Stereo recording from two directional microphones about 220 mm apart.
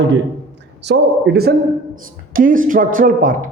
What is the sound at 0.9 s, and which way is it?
A man's voice, 50° right (ahead or behind).